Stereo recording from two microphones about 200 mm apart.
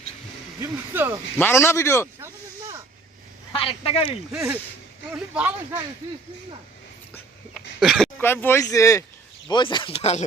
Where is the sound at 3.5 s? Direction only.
25° left (ahead or behind).